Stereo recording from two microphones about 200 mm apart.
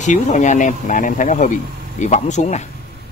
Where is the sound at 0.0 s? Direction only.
40° left (ahead or behind).